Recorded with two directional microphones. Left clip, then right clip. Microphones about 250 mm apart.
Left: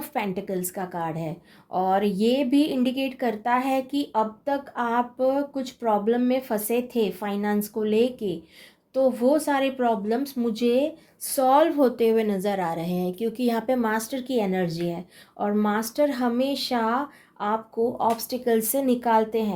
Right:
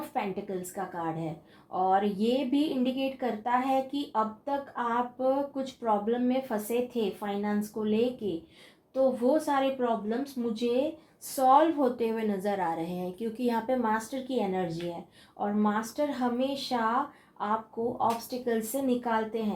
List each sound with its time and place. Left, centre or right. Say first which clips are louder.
0.1 s a woman's voice: left 6 dB; left